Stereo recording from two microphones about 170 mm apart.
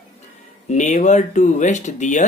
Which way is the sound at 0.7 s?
45° left (ahead or behind).